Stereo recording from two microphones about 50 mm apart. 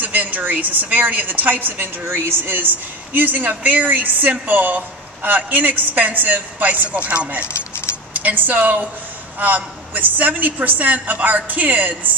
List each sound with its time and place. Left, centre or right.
0.0 s a woman's voice: right